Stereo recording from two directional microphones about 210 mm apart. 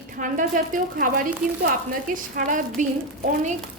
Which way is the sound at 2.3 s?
40° right (ahead or behind).